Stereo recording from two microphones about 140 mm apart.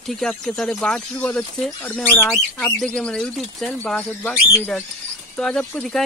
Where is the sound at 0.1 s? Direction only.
5° left (ahead or behind).